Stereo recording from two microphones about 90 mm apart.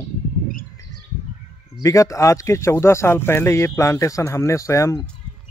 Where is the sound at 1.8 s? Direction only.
35° left (ahead or behind).